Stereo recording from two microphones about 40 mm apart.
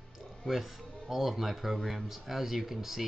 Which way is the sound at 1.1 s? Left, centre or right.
Centre.